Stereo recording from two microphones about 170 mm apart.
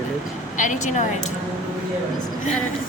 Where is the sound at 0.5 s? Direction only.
50° left (ahead or behind).